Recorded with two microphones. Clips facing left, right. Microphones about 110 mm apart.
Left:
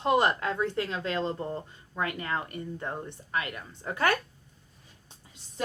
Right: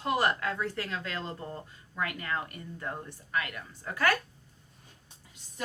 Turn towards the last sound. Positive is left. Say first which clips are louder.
# left 1 dB
turn(degrees=25)  # may be behind; listen again after turning